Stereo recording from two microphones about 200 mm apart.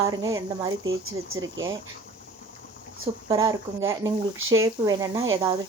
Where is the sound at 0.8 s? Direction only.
90° right.